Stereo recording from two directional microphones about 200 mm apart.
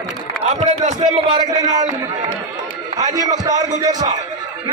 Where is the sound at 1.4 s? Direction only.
20° right (ahead or behind).